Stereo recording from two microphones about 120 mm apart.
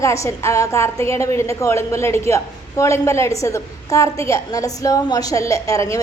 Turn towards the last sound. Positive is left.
turn(degrees=25)  # may be behind; listen again after turning